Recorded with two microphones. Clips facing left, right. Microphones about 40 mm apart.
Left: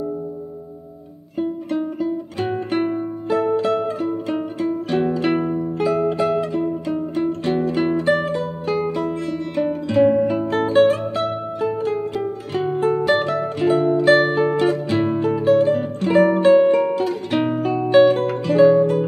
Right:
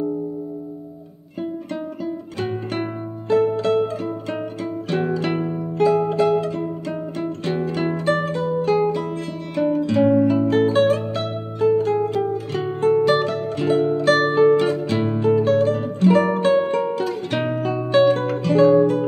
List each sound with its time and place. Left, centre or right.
1.4 s music: centre